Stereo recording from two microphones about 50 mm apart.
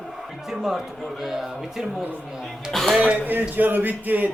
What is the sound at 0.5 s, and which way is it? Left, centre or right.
A man's voice, centre.